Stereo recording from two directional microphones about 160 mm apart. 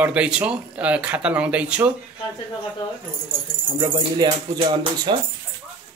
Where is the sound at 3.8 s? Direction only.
25° right (ahead or behind).